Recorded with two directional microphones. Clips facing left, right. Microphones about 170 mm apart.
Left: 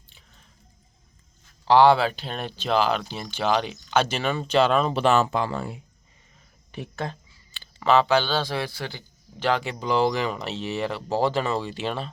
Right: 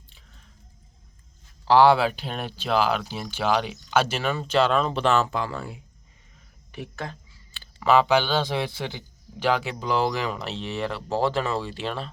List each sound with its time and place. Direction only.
1.6 s speech: 5° right (ahead or behind); by 7.2 s 30° left (ahead or behind)
7.5 s speech: centre (ahead or behind)